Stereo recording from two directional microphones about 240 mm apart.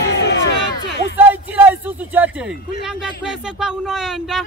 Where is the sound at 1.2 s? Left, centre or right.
Centre.